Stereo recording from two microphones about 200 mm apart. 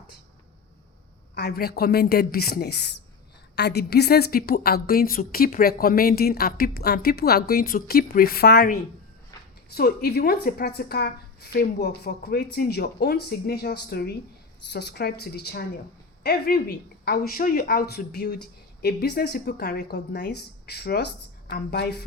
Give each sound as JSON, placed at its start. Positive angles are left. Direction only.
{"t": 1.4, "sound": "a woman's voice", "side_deg": 50}
{"t": 9.3, "sound": "a sound", "side_deg": 15}
{"t": 9.6, "sound": "a woman's voice", "side_deg": 50}